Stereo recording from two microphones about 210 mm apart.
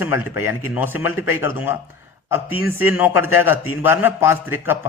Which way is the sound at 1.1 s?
10° right (ahead or behind).